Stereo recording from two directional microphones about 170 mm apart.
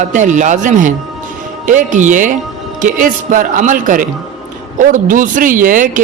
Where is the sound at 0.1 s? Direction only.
45° right (ahead or behind).